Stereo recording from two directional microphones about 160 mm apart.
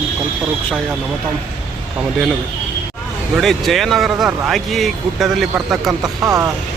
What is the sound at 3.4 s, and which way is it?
A man's voice, centre (ahead or behind).